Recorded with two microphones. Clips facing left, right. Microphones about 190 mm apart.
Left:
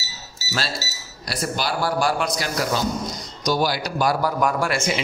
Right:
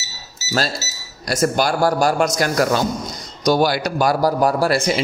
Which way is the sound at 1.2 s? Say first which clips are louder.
Right 8 dB; 45° right (ahead or behind).